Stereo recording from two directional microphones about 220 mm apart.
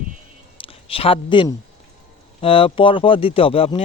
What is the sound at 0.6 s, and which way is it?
Speech, 25° left (ahead or behind).